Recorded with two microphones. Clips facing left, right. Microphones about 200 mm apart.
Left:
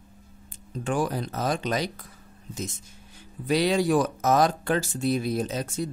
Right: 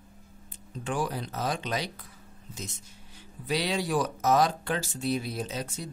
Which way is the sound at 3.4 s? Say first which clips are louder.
Left 7 dB; 50° left (ahead or behind).